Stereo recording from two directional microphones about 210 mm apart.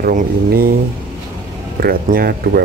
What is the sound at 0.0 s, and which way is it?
Speech, 45° right (ahead or behind).